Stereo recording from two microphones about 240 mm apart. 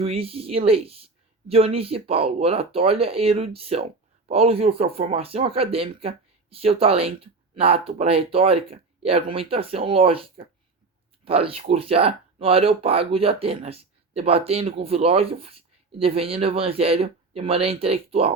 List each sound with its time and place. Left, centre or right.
0.0 s speech: right